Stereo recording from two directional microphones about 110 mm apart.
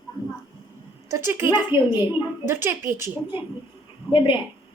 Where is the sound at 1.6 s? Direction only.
45° left (ahead or behind).